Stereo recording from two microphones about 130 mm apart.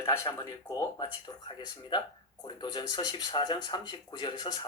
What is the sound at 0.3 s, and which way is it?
Speech, 30° left (ahead or behind).